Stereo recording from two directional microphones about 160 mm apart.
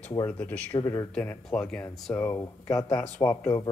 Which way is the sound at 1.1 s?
10° left (ahead or behind).